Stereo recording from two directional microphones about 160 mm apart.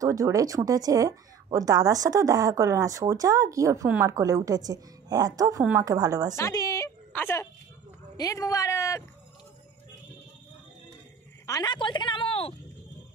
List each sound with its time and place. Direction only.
0.0 s speech: 20° right (ahead or behind)
6.3 s a woman's voice: 20° left (ahead or behind)
11.4 s a woman's voice: 25° left (ahead or behind)